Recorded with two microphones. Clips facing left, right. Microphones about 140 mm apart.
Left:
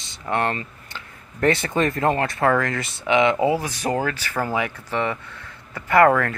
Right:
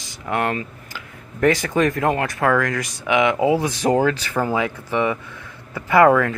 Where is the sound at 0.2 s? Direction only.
5° right (ahead or behind).